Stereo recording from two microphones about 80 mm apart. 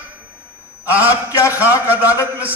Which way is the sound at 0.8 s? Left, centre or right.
Right.